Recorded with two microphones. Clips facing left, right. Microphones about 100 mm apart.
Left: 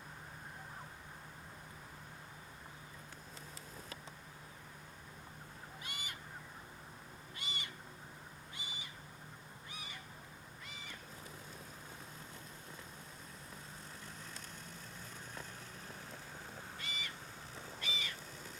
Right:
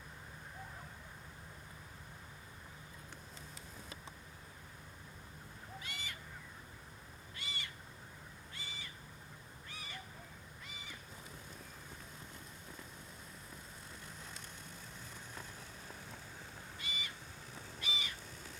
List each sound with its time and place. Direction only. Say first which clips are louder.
5.8 s goose: left 1 dB; 15° left (ahead or behind)
7.3 s owl: left 1 dB; 20° left (ahead or behind)
16.8 s owl: right 1 dB; 15° right (ahead or behind)
17.7 s bird: right 1 dB; 15° right (ahead or behind)